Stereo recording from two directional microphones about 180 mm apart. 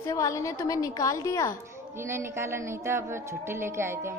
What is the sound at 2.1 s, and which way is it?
A woman's voice, 15° right (ahead or behind).